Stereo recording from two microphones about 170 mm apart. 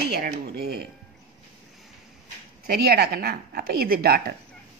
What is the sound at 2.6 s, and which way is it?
A woman's voice, 65° right (ahead or behind).